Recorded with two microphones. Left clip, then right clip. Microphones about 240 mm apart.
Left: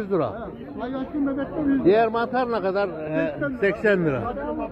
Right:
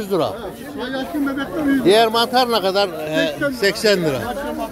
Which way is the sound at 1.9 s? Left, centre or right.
Centre.